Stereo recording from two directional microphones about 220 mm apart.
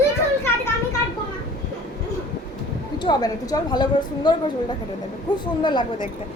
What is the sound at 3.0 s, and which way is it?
A woman's voice, 20° left (ahead or behind).